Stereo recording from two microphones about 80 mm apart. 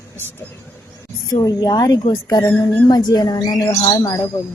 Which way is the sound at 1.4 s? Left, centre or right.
Left.